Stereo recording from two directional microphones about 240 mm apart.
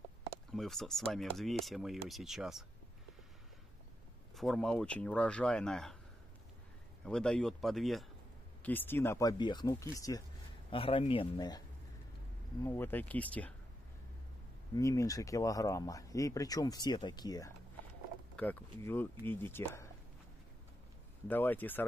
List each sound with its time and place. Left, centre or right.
0.5 s speech: centre
4.4 s speech: centre
7.1 s speech: centre
12.6 s speech: centre
14.8 s speech: centre
21.3 s speech: centre